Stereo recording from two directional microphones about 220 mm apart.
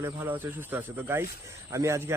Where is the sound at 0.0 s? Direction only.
10° right (ahead or behind).